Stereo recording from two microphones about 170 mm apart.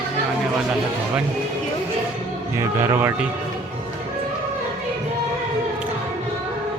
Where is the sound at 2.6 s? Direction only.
15° right (ahead or behind).